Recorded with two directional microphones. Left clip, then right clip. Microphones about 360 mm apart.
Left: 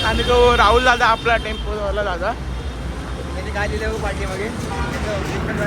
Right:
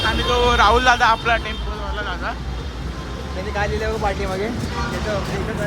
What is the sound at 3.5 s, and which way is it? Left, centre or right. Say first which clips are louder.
Speech: right 1 dB; right.